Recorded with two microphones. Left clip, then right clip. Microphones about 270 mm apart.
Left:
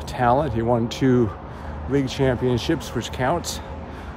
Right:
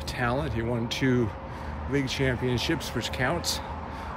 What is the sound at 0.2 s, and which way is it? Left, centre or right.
Speech, centre.